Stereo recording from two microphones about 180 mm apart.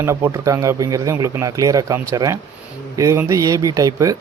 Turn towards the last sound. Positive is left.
turn(degrees=-20)  # may be behind; listen again after turning